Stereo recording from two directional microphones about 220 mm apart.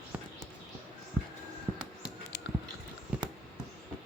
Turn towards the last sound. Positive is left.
turn(degrees=-5)  # may be behind; listen again after turning